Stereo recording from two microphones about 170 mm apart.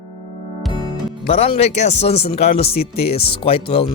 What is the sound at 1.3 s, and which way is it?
Speech, 40° left (ahead or behind).